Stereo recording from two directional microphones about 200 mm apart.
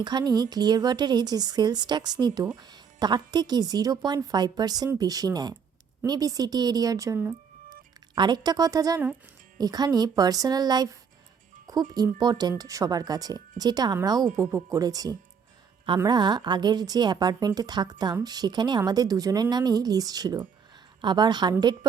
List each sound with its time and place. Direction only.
0.0 s a woman's voice: 20° right (ahead or behind)